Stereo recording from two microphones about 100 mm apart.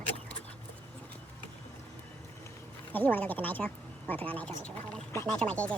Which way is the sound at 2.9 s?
15° left (ahead or behind).